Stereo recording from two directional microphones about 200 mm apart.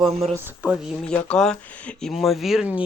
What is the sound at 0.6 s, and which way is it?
Speech, 5° right (ahead or behind).